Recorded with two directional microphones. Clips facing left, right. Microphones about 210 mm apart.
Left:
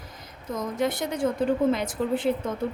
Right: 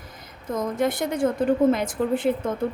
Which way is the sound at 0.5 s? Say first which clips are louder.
Right 3 dB; 50° right (ahead or behind).